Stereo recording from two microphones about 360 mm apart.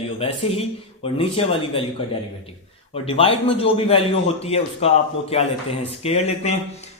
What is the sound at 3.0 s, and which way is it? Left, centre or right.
Speech, centre.